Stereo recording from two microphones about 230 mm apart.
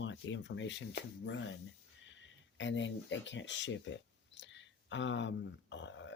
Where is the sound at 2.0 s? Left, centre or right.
Left.